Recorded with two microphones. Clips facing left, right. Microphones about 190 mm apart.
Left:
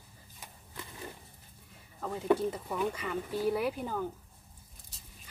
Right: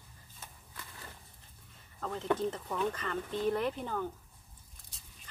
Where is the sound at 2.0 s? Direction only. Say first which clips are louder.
Left 4 dB; 10° left (ahead or behind).